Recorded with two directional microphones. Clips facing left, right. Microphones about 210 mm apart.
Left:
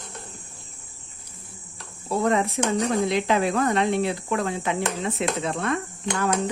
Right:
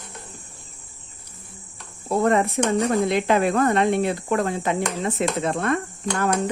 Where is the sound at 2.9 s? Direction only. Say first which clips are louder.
Right 2 dB; 50° right (ahead or behind).